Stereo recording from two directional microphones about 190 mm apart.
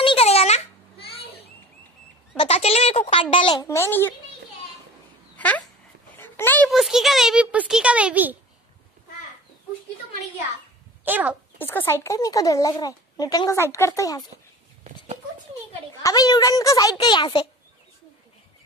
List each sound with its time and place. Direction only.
0.0 s a sound: 30° left (ahead or behind)
2.3 s a child's voice: 30° left (ahead or behind)
3.6 s speech: 15° left (ahead or behind)
6.1 s dog: 10° left (ahead or behind)
6.7 s a child's voice: centre (ahead or behind)
11.1 s speech: 10° right (ahead or behind)
11.5 s speech: 10° left (ahead or behind)
16.0 s a child's voice: 20° left (ahead or behind)